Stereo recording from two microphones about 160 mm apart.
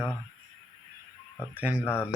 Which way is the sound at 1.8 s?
15° left (ahead or behind).